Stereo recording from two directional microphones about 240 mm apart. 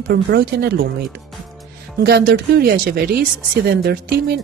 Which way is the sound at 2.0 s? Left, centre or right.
Right.